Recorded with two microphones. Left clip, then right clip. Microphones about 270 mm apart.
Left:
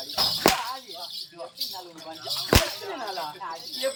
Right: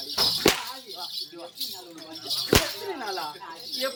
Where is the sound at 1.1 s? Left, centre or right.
Centre.